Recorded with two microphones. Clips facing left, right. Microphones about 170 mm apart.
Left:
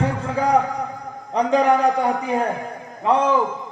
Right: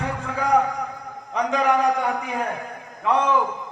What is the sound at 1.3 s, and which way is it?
A man's voice, 35° left (ahead or behind).